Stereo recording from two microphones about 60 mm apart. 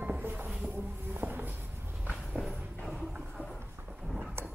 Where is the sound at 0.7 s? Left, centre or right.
Right.